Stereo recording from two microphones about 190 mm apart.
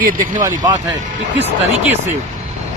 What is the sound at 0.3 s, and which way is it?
Speech, 20° right (ahead or behind).